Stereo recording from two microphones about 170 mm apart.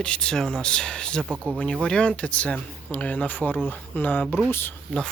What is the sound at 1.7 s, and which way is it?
Speech, 5° left (ahead or behind).